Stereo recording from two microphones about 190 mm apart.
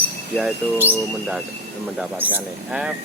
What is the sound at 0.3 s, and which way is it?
Speech, 10° right (ahead or behind).